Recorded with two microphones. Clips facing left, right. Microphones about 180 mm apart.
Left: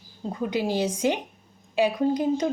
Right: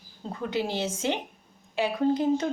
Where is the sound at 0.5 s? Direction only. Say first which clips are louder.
Left 3 dB; 15° left (ahead or behind).